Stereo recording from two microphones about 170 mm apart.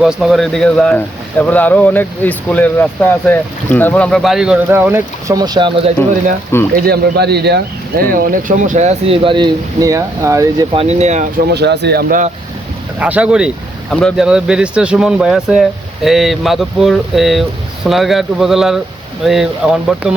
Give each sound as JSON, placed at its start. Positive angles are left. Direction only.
{"t": 0.0, "sound": "speech", "side_deg": 0}
{"t": 6.7, "sound": "speech", "side_deg": -65}
{"t": 8.1, "sound": "speech", "side_deg": -55}
{"t": 10.8, "sound": "speech", "side_deg": -40}
{"t": 11.5, "sound": "speech", "side_deg": -80}
{"t": 13.0, "sound": "speech", "side_deg": -10}